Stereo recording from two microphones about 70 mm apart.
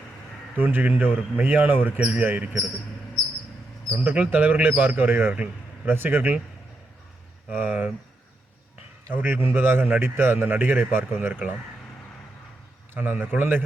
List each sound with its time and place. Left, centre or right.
0.5 s a man's voice: right
4.0 s a man's voice: right
7.5 s a man's voice: right
9.0 s a man's voice: right
12.9 s a man's voice: right